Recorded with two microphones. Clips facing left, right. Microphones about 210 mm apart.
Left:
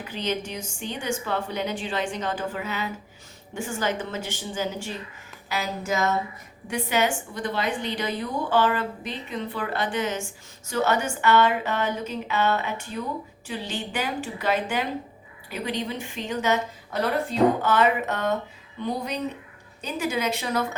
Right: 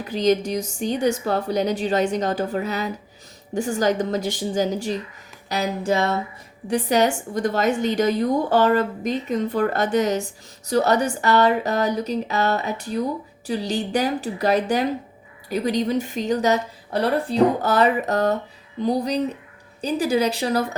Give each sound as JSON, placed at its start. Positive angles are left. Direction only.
{"t": 0.0, "sound": "a woman's voice", "side_deg": -40}